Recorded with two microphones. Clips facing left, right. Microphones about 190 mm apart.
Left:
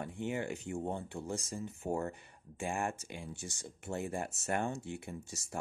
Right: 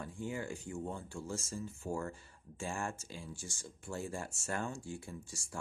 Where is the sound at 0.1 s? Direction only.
20° left (ahead or behind).